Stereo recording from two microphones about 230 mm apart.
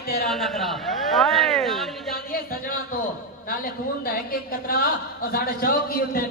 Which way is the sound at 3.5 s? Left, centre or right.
Left.